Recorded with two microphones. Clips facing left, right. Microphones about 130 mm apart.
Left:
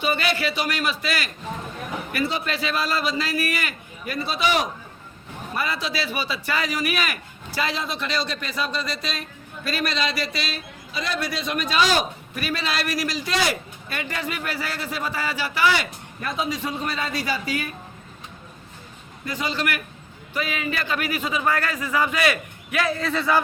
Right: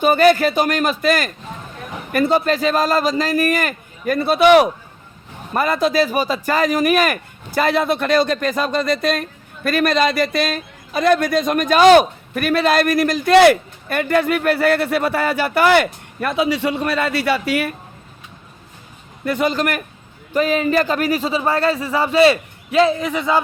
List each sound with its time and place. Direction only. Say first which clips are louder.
0.0 s a man's voice: right 11 dB; 45° right (ahead or behind); by 4.7 s 60° right (ahead or behind)
5.5 s a man's voice: right 11 dB; 50° right (ahead or behind); by 17.7 s 70° right (ahead or behind)
19.2 s a man's voice: right 8 dB; 60° right (ahead or behind); by 23.4 s 20° right (ahead or behind)